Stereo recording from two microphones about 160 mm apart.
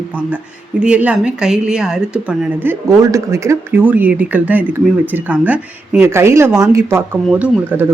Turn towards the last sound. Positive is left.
turn(degrees=-10)  # may be behind; listen again after turning